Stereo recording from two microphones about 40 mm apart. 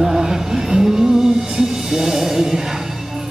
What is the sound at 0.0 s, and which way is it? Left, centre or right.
Music, centre.